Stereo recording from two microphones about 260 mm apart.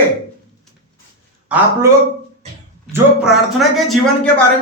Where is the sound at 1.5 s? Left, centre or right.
Centre.